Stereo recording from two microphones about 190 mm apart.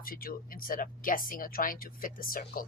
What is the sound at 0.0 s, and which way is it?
Speech, 50° left (ahead or behind).